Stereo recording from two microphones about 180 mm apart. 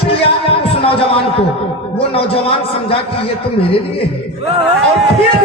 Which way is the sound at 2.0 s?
30° left (ahead or behind).